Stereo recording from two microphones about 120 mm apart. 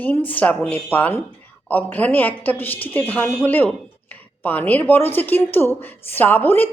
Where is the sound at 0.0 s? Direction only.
15° left (ahead or behind).